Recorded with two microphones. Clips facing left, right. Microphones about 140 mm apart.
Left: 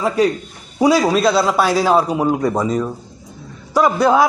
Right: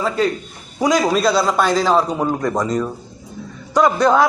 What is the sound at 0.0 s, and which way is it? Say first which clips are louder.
A man's voice: left 3 dB; 10° left (ahead or behind).